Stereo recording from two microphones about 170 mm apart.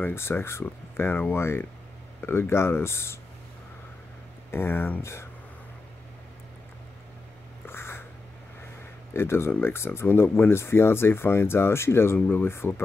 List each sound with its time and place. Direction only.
0.0 s speech: 15° left (ahead or behind)
4.5 s speech: 15° left (ahead or behind)
7.6 s a sound: 15° left (ahead or behind)
9.1 s speech: 15° left (ahead or behind)